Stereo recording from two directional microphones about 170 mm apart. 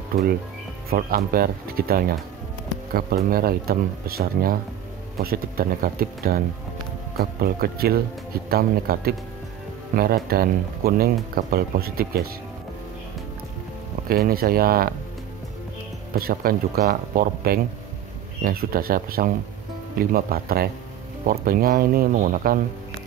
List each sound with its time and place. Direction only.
0.8 s speech: 60° right (ahead or behind)
14.0 s speech: 60° right (ahead or behind)
16.2 s speech: 60° right (ahead or behind)